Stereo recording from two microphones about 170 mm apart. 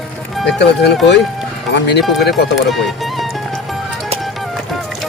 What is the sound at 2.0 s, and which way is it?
Speech, centre (ahead or behind).